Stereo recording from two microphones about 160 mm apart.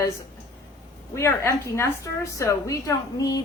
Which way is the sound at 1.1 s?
15° left (ahead or behind).